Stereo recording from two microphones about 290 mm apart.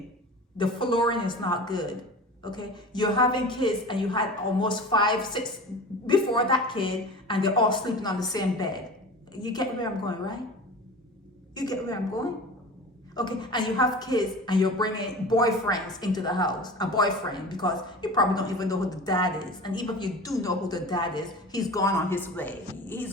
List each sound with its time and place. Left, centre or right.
0.5 s a woman's voice: centre
11.5 s a woman's voice: centre